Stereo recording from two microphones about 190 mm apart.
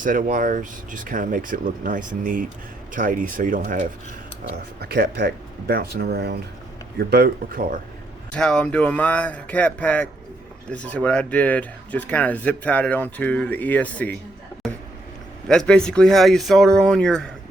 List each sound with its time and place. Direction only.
0.0 s speech: 45° right (ahead or behind)
8.3 s speech: 5° left (ahead or behind)
15.4 s speech: 5° left (ahead or behind)